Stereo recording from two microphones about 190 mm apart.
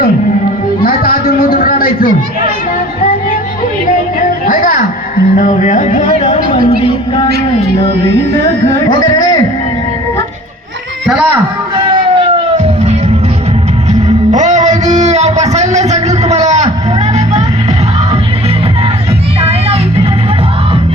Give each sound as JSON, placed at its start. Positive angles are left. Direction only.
{"t": 0.8, "sound": "music", "side_deg": 50}
{"t": 4.4, "sound": "music", "side_deg": 45}
{"t": 6.1, "sound": "speech", "side_deg": 30}
{"t": 8.9, "sound": "speech", "side_deg": 20}
{"t": 11.9, "sound": "a sound", "side_deg": -25}
{"t": 12.5, "sound": "music", "side_deg": -35}
{"t": 14.3, "sound": "a sound", "side_deg": -40}
{"t": 19.4, "sound": "music", "side_deg": -30}